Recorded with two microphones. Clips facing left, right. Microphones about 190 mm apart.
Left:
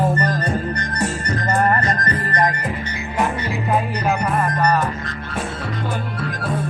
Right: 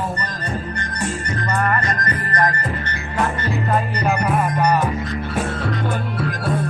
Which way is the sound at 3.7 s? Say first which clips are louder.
Left 1 dB; 5° left (ahead or behind).